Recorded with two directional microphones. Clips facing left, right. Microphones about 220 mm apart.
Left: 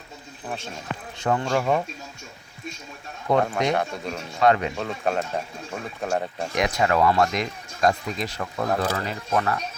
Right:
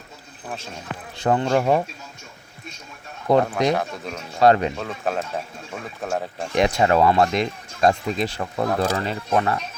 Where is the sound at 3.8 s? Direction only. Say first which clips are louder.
Left 1 dB; centre (ahead or behind).